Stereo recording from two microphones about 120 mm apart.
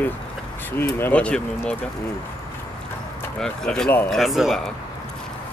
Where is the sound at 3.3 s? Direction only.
5° left (ahead or behind).